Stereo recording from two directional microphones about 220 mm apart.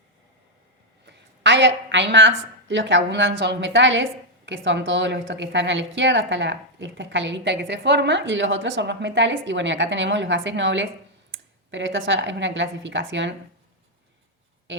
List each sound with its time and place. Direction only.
1.5 s a woman's voice: 55° right (ahead or behind)